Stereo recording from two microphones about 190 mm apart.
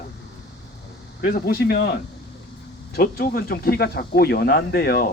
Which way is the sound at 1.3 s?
55° left (ahead or behind).